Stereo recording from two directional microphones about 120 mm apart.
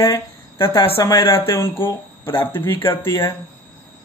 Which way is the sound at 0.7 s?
45° left (ahead or behind).